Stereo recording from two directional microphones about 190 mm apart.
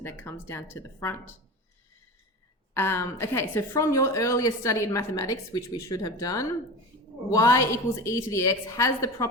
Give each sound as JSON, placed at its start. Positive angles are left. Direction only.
{"t": 0.0, "sound": "a woman's voice", "side_deg": 10}
{"t": 2.7, "sound": "a woman's voice", "side_deg": 10}